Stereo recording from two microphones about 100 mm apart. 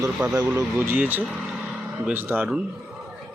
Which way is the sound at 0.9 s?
20° right (ahead or behind).